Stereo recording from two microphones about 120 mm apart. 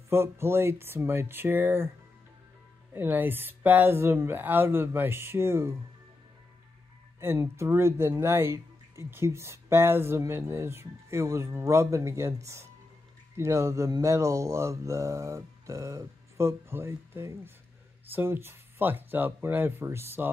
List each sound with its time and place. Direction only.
0.1 s speech: 20° right (ahead or behind)
2.9 s speech: 15° right (ahead or behind)
7.2 s speech: 20° right (ahead or behind)